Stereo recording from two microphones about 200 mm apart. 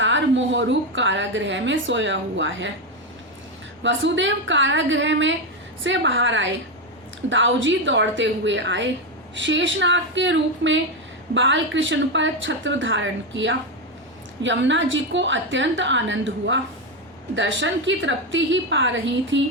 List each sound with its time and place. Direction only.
0.0 s a woman's voice: 65° right (ahead or behind)
3.8 s a woman's voice: 70° right (ahead or behind)